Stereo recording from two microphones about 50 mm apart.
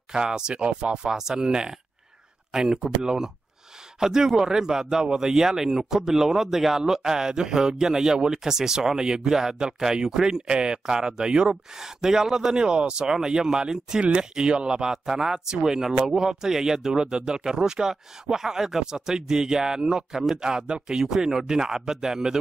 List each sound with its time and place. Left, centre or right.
0.1 s a man's voice: centre